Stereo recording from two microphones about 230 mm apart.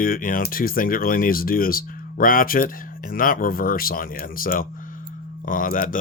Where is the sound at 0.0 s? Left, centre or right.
Left.